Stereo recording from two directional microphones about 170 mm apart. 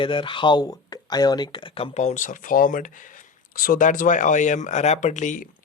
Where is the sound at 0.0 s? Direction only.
30° left (ahead or behind).